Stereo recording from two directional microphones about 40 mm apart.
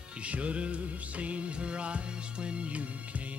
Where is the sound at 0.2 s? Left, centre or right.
Right.